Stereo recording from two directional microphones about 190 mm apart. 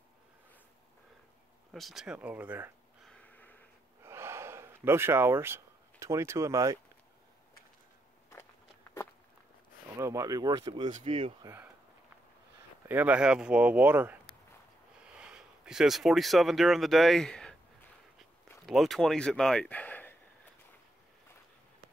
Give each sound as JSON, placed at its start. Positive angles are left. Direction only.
{"t": 1.7, "sound": "speech", "side_deg": 0}
{"t": 3.1, "sound": "a sound", "side_deg": 5}
{"t": 4.0, "sound": "gasp", "side_deg": -15}
{"t": 9.9, "sound": "speech", "side_deg": -15}
{"t": 10.9, "sound": "speech", "side_deg": -35}
{"t": 11.4, "sound": "speech", "side_deg": -10}
{"t": 12.8, "sound": "speech", "side_deg": -10}
{"t": 15.1, "sound": "speech", "side_deg": -5}
{"t": 18.7, "sound": "speech", "side_deg": 0}